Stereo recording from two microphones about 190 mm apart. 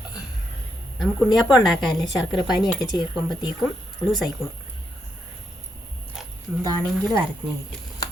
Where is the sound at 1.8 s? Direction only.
25° left (ahead or behind).